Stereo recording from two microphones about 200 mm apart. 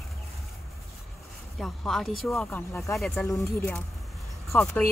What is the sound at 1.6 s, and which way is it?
Speech, centre (ahead or behind).